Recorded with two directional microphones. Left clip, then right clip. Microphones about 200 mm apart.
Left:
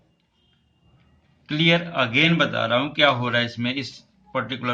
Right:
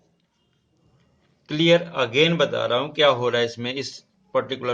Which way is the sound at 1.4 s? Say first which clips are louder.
Right 2 dB; 55° right (ahead or behind).